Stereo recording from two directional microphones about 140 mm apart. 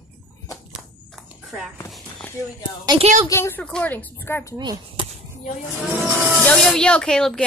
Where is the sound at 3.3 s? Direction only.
15° left (ahead or behind).